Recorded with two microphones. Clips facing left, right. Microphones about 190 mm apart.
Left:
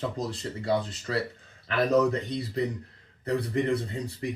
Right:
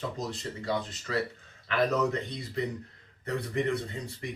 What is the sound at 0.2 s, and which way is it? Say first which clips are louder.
Speech: left 3 dB; 35° left (ahead or behind).